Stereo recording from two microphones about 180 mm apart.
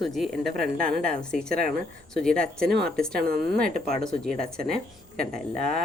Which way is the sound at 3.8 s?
40° left (ahead or behind).